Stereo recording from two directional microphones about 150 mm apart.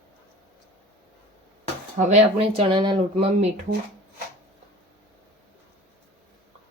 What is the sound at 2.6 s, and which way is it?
Speech, 30° right (ahead or behind).